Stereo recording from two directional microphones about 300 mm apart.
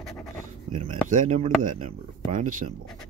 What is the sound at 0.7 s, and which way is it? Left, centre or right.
Speech, right.